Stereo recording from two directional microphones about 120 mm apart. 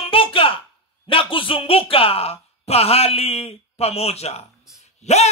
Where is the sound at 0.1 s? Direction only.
50° left (ahead or behind).